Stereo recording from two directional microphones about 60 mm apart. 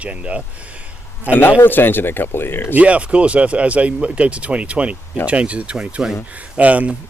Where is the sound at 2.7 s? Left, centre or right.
Right.